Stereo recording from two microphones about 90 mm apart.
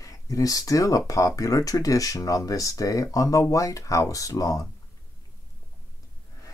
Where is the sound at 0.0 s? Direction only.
40° left (ahead or behind).